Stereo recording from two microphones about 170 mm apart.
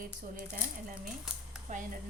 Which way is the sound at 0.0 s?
55° right (ahead or behind).